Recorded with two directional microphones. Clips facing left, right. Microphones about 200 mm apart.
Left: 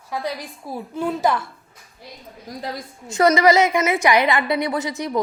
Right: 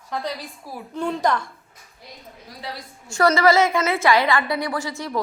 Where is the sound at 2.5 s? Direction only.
40° left (ahead or behind).